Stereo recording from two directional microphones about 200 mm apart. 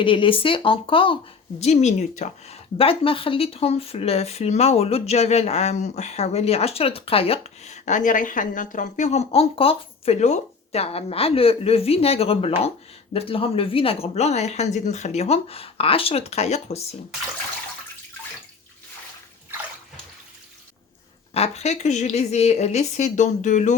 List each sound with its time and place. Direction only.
0.0 s speech: 25° left (ahead or behind)
21.3 s speech: 30° left (ahead or behind)